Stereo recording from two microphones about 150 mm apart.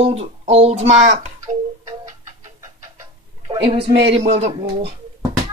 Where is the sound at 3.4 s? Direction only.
35° right (ahead or behind).